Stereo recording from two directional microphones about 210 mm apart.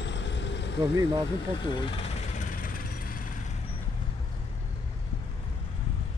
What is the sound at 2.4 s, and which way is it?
Vehicle, 40° left (ahead or behind).